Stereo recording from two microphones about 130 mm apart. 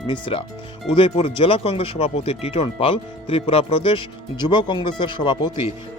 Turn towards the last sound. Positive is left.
turn(degrees=40)  # may be behind; listen again after turning